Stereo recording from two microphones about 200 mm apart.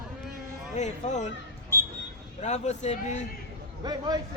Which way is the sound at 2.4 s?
35° left (ahead or behind).